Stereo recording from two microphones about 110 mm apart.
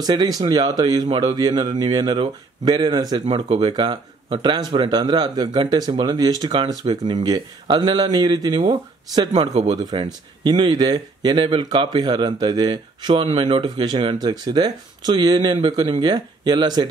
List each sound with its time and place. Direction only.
0.0 s speech: 40° right (ahead or behind)
1.0 s speech: 50° right (ahead or behind)
9.5 s speech: 80° right
9.8 s speech: 40° right (ahead or behind)